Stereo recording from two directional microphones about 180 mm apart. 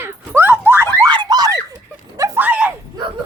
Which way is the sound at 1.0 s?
25° right (ahead or behind).